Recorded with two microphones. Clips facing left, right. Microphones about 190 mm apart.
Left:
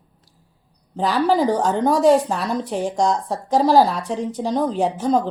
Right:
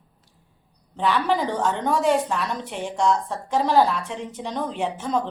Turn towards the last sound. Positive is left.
turn(degrees=35)  # may be behind; listen again after turning